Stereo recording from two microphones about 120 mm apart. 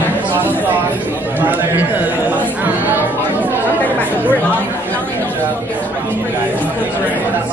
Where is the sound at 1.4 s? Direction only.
15° right (ahead or behind).